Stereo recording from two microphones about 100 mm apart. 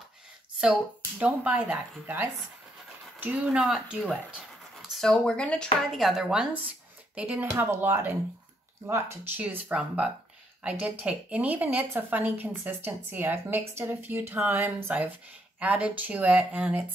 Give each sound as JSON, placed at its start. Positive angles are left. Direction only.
{"t": 1.2, "sound": "speech", "side_deg": -15}
{"t": 5.9, "sound": "speech", "side_deg": 0}
{"t": 7.5, "sound": "speech", "side_deg": -25}